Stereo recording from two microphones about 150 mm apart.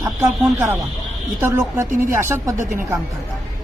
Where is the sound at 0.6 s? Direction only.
20° right (ahead or behind).